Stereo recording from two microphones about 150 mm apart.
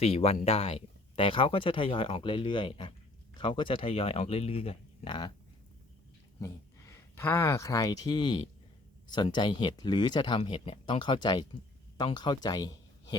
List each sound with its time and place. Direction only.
0.0 s speech: 45° left (ahead or behind)
6.4 s speech: 20° left (ahead or behind)